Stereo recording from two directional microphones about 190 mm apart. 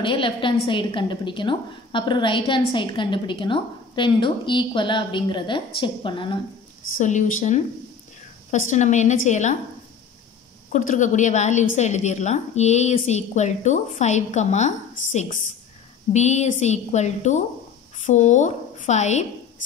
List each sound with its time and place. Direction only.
0.0 s a woman's voice: 25° left (ahead or behind)
7.0 s a woman's voice: 40° left (ahead or behind)
10.7 s a woman's voice: 40° left (ahead or behind)